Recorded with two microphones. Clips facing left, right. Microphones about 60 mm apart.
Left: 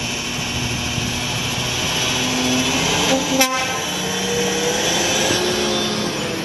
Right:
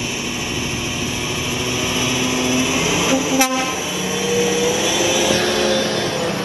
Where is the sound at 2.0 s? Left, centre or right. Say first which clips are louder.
Even; right.